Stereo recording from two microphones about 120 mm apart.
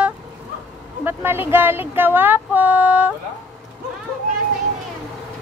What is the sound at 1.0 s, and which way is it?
Speech, 15° right (ahead or behind).